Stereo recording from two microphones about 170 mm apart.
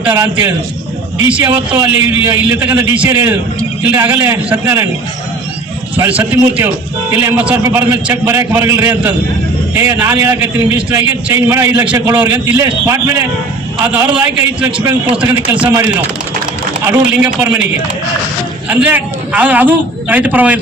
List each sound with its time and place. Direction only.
0.0 s a man's voice: 15° right (ahead or behind)
6.0 s a man's voice: 10° right (ahead or behind)
17.4 s a man's voice: 5° right (ahead or behind)
18.7 s a man's voice: 10° right (ahead or behind)